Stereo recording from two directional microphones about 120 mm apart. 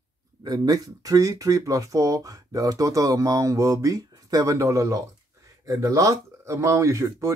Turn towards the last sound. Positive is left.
turn(degrees=-25)  # may be behind; listen again after turning